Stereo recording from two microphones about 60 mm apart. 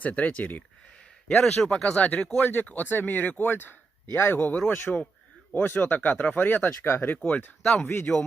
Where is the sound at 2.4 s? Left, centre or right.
Left.